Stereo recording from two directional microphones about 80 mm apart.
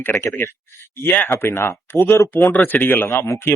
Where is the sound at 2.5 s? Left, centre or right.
Left.